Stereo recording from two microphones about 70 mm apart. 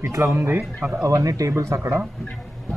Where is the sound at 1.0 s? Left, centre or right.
Right.